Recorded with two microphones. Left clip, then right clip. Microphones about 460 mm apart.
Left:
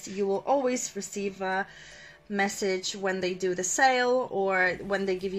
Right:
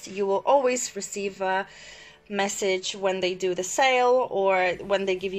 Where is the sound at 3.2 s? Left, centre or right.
Right.